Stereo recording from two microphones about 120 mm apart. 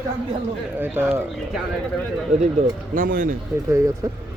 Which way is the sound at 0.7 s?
15° right (ahead or behind).